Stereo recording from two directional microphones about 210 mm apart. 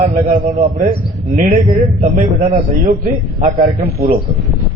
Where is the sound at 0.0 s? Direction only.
45° right (ahead or behind).